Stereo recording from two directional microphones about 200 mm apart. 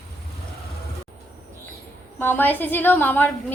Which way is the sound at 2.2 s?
10° left (ahead or behind).